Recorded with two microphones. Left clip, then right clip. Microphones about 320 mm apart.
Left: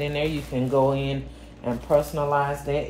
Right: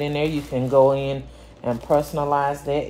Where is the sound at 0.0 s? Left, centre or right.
Right.